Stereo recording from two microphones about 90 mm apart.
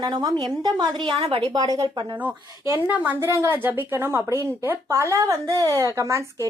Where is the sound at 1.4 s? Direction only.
40° right (ahead or behind).